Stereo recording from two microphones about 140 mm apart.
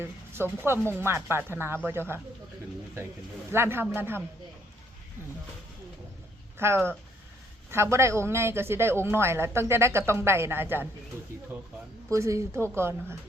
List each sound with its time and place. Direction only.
0.0 s a man's voice: 15° right (ahead or behind)
3.5 s a man's voice: 15° right (ahead or behind)
6.6 s a man's voice: 15° right (ahead or behind)